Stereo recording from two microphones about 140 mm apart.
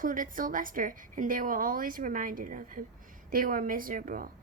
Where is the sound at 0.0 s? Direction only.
75° right (ahead or behind).